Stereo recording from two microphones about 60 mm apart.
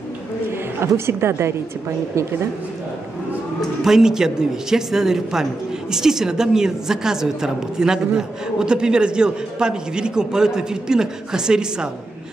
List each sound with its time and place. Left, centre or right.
0.5 s a woman's voice: right
3.8 s a man's voice: centre